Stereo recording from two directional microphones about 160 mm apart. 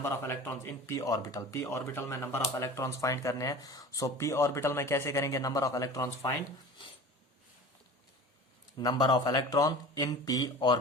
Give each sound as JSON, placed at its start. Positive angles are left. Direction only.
{"t": 0.0, "sound": "speech", "side_deg": 15}
{"t": 8.8, "sound": "speech", "side_deg": 25}